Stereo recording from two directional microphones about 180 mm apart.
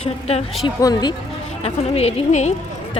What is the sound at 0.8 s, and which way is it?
Speech, 20° left (ahead or behind).